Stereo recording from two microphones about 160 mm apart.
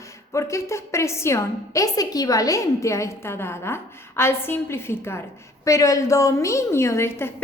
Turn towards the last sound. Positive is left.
turn(degrees=15)  # may be behind; listen again after turning